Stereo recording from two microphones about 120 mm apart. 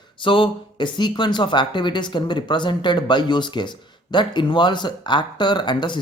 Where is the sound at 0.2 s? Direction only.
45° left (ahead or behind).